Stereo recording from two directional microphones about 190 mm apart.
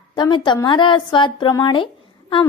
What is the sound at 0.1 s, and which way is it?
A woman's voice, 25° left (ahead or behind).